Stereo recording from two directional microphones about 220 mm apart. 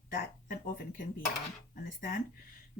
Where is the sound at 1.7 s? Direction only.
40° left (ahead or behind).